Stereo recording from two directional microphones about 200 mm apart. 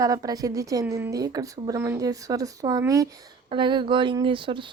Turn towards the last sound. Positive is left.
turn(degrees=-25)  # may be behind; listen again after turning